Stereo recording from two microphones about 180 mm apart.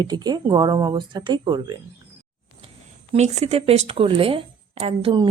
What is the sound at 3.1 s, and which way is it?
Speech, 35° right (ahead or behind).